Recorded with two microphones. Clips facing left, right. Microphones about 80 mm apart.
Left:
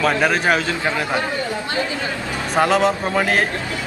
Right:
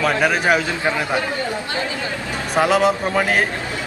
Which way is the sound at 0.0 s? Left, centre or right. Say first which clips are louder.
Even; centre.